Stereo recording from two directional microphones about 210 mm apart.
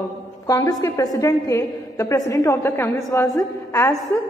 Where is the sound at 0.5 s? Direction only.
15° left (ahead or behind).